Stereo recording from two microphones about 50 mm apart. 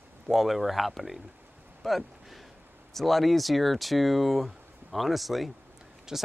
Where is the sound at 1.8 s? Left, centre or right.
Centre.